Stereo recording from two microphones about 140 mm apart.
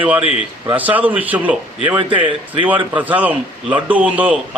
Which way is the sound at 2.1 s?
35° right (ahead or behind).